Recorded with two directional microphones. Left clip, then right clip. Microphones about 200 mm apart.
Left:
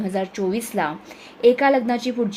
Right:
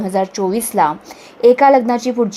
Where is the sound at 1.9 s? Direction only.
Centre (ahead or behind).